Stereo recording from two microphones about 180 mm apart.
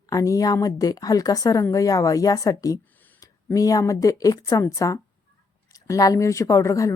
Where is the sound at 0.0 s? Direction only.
20° left (ahead or behind).